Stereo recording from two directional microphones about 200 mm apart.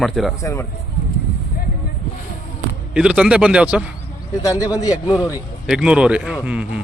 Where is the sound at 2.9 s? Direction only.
5° right (ahead or behind).